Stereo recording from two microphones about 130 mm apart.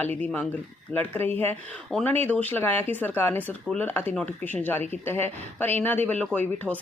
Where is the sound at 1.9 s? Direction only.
5° left (ahead or behind).